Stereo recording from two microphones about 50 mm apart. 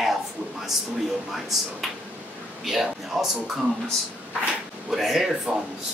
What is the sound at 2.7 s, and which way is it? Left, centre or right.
Speech, centre.